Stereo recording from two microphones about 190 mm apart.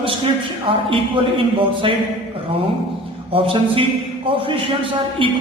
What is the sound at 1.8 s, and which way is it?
Speech, 25° right (ahead or behind).